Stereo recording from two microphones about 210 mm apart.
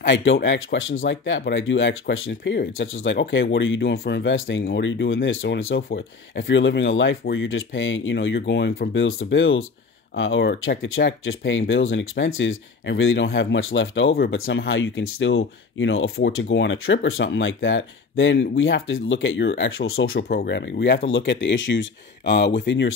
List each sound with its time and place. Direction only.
0.0 s speech: 65° left (ahead or behind)
3.9 s speech: 50° left (ahead or behind)
8.9 s speech: 65° left (ahead or behind)